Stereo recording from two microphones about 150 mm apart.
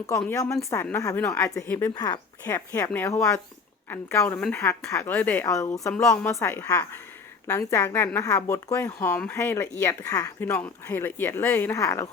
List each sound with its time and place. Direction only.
0.3 s speech: 20° left (ahead or behind)
2.0 s speech: 25° left (ahead or behind)